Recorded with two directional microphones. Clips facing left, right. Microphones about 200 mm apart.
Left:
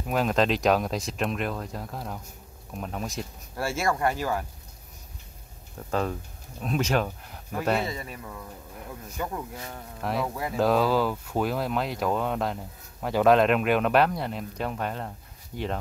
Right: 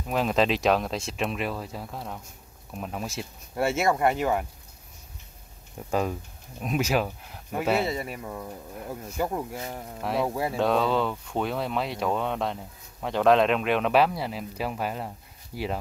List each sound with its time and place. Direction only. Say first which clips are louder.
0.0 s speech: even; centre (ahead or behind)
3.5 s speech: right 3 dB; 20° right (ahead or behind)
5.8 s speech: right 1 dB; 10° right (ahead or behind)
7.8 s speech: right 4 dB; 30° right (ahead or behind)
10.5 s speech: left 3 dB; centre (ahead or behind)